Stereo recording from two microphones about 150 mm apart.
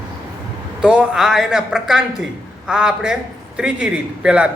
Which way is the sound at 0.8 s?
5° right (ahead or behind).